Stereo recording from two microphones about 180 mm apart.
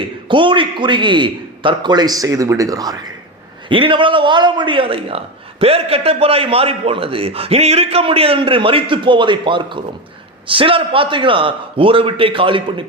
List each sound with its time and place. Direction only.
0.3 s a man's voice: 25° right (ahead or behind)